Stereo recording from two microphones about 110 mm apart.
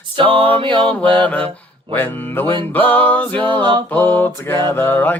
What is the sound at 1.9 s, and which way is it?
Music, 15° left (ahead or behind).